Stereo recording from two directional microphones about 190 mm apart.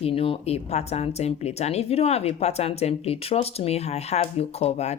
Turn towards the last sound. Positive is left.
turn(degrees=35)  # may be behind; listen again after turning